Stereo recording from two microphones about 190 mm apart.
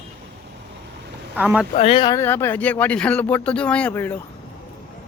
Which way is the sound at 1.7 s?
30° left (ahead or behind).